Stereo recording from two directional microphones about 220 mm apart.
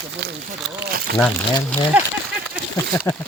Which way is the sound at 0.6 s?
Centre (ahead or behind).